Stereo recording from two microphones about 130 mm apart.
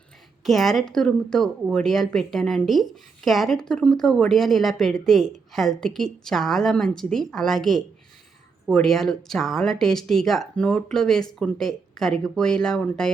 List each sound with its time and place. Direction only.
0.4 s a woman's voice: centre (ahead or behind)